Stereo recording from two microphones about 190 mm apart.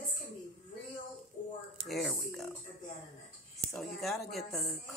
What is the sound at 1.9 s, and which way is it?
Speech, centre (ahead or behind).